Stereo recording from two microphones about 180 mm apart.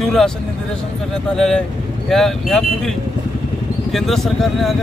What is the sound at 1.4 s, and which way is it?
Speech, centre (ahead or behind).